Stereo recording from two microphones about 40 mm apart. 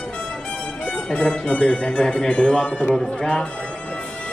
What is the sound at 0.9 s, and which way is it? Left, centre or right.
Speech, centre.